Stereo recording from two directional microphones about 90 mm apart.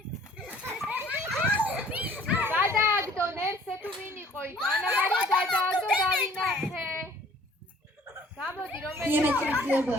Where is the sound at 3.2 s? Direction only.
25° right (ahead or behind).